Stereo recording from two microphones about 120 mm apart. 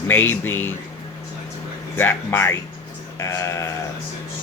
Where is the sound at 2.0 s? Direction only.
20° left (ahead or behind).